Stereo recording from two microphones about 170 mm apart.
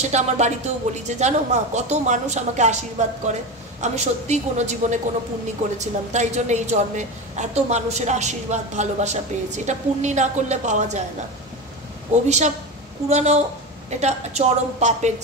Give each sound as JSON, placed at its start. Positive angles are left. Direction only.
{"t": 0.1, "sound": "a woman's voice", "side_deg": -40}
{"t": 12.3, "sound": "a woman's voice", "side_deg": -40}